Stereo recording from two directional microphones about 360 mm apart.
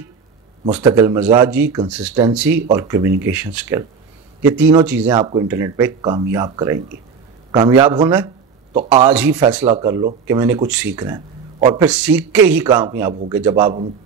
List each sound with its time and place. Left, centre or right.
0.7 s speech: centre